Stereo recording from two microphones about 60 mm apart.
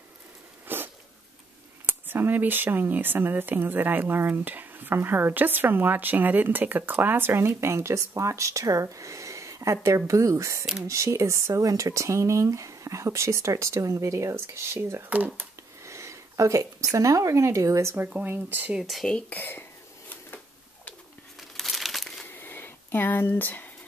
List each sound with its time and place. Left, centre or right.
0.7 s sneeze: right
1.9 s speech: right
11.6 s speech: right
15.0 s speech: right
15.8 s speech: right
18.2 s speech: right
19.2 s speech: left
21.4 s crumpling: centre
22.3 s a sound: left